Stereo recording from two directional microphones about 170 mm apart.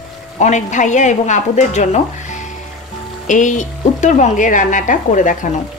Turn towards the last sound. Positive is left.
turn(degrees=50)  # may be behind; listen again after turning